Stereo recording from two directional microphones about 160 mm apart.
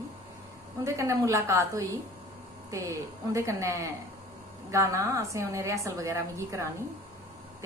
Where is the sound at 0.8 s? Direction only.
20° right (ahead or behind).